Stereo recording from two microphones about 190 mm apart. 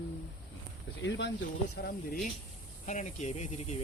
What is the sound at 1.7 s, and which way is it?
Speech, 55° left (ahead or behind).